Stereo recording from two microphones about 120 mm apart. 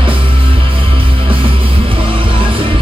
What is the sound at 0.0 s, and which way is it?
Music, 45° right (ahead or behind).